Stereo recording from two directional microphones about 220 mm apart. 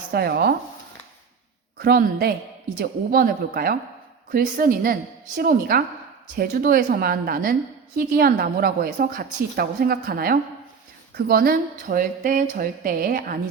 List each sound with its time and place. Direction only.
0.1 s a woman's voice: 45° right (ahead or behind)
1.8 s a woman's voice: 45° right (ahead or behind)